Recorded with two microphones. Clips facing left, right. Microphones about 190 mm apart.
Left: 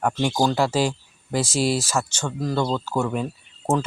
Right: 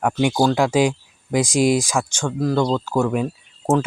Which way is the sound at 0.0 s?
10° right (ahead or behind).